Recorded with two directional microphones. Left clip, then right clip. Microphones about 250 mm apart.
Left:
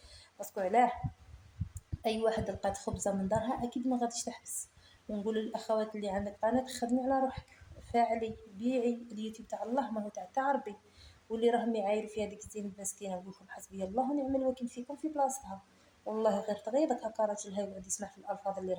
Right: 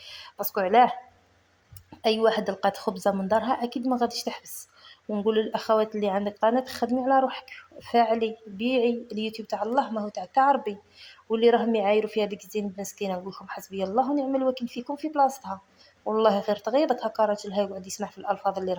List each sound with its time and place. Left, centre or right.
0.4 s a woman's voice: right
2.0 s a woman's voice: right